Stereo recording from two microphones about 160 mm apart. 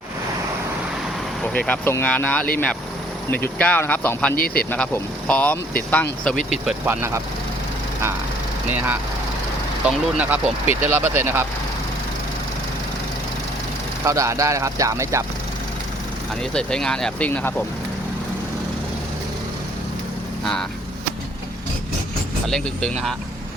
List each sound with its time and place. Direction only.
1.4 s speech: 10° left (ahead or behind)
4.4 s speech: 65° left (ahead or behind)
5.3 s speech: 10° left (ahead or behind)
6.7 s speech: 10° right (ahead or behind)
8.7 s speech: 10° right (ahead or behind)
14.0 s speech: 20° right (ahead or behind)
16.4 s speech: 5° left (ahead or behind)
20.4 s speech: 5° left (ahead or behind)
22.4 s speech: 5° left (ahead or behind)